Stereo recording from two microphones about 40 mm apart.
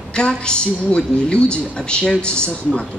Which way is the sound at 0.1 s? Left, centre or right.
Left.